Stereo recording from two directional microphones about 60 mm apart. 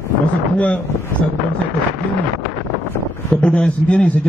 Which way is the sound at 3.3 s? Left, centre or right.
Centre.